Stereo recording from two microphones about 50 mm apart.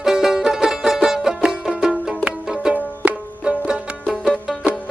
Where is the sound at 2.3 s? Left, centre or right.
Right.